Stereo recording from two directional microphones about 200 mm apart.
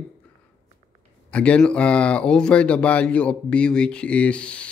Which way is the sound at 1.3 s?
5° left (ahead or behind).